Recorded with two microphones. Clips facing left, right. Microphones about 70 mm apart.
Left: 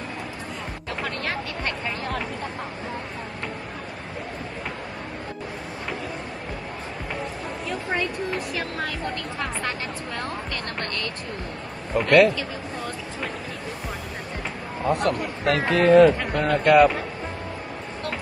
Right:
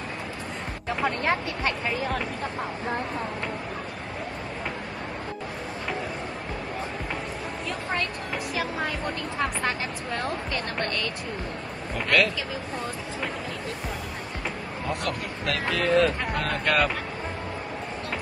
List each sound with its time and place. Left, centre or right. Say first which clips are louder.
1.0 s a sound: right 5 dB; right
9.4 s speech: right 3 dB; centre
11.9 s speech: left 7 dB; left
15.0 s speech: left 6 dB; left
16.6 s speech: left 9 dB; centre